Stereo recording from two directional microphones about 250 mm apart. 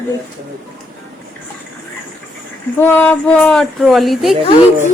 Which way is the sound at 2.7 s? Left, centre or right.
Centre.